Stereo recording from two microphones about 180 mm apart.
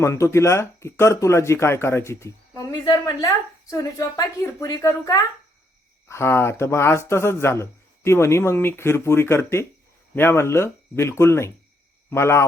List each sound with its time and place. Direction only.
0.0 s speech: 15° left (ahead or behind)